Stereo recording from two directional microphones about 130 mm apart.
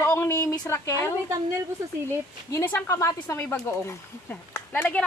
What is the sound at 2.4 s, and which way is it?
Speech, 20° left (ahead or behind).